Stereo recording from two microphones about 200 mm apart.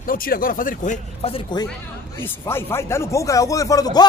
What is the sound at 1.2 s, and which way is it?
Speech, 25° left (ahead or behind).